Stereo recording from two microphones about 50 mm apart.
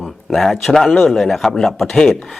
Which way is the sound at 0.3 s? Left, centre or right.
Centre.